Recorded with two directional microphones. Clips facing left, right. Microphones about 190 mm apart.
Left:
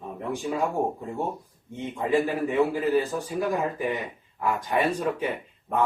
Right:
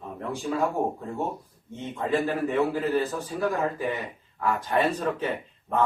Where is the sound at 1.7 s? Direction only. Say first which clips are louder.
Left 2 dB; 15° left (ahead or behind).